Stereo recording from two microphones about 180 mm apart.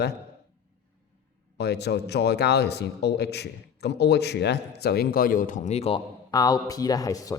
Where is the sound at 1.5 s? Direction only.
65° left (ahead or behind); by 6.0 s 35° left (ahead or behind).